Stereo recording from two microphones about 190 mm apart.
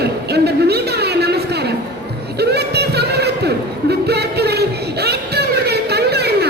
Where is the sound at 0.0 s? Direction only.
60° right (ahead or behind).